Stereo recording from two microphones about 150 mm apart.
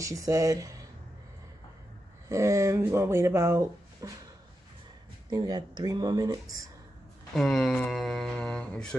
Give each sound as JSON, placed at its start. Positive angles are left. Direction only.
{"t": 0.0, "sound": "speech", "side_deg": -20}
{"t": 2.2, "sound": "speech", "side_deg": -20}
{"t": 5.3, "sound": "speech", "side_deg": -25}
{"t": 7.3, "sound": "speech", "side_deg": 5}